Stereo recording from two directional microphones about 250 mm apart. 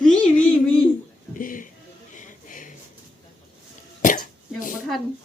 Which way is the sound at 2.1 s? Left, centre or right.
Left.